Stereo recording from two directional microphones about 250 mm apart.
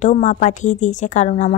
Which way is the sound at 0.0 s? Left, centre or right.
Left.